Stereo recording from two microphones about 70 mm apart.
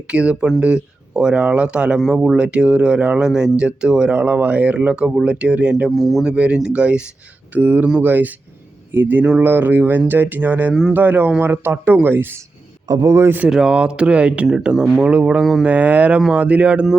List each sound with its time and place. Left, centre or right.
0.1 s speech: centre
5.9 s speech: centre
6.3 s speech: centre; by 12.4 s right
12.9 s a man's voice: right
13.1 s a man's voice: right
13.5 s speech: centre
15.1 s speech: centre